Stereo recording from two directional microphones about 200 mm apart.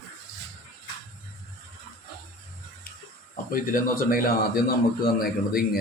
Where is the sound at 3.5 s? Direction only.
45° left (ahead or behind).